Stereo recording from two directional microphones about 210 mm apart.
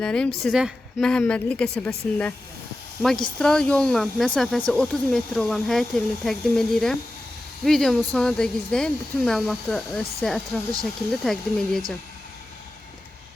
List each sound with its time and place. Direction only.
0.0 s a woman's voice: 5° left (ahead or behind)